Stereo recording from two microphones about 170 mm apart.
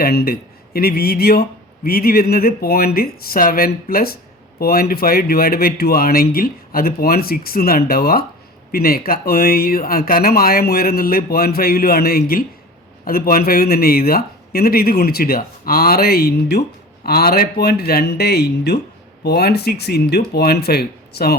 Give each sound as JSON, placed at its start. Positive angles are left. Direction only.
{"t": 0.0, "sound": "speech", "side_deg": 65}